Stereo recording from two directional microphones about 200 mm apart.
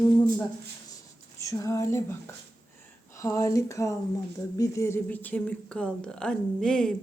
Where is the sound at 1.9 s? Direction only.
10° left (ahead or behind).